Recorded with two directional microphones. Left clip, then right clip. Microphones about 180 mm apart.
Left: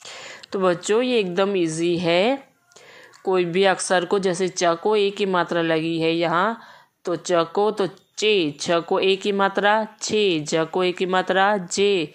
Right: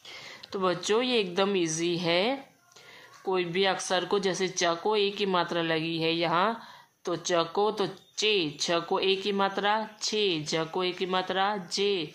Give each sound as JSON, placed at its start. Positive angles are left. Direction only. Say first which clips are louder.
{"t": 0.1, "sound": "speech", "louder": "left 7 dB", "side_deg": 40}